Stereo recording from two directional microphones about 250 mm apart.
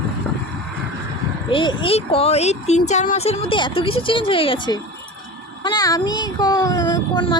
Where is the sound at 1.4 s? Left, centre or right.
Centre.